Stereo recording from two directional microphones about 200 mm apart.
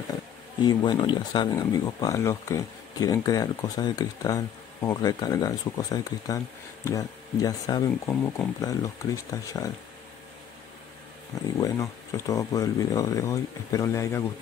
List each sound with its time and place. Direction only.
0.6 s speech: 20° left (ahead or behind)
11.5 s speech: 15° left (ahead or behind)